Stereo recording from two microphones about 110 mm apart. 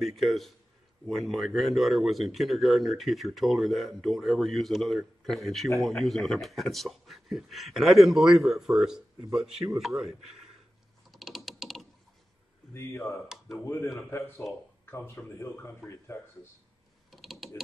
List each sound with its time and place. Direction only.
0.0 s speech: centre (ahead or behind)
11.1 s typing: centre (ahead or behind)
12.7 s speech: 25° left (ahead or behind)
17.1 s creak: centre (ahead or behind)